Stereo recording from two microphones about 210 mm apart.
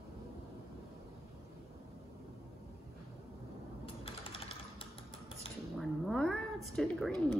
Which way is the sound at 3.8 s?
25° left (ahead or behind).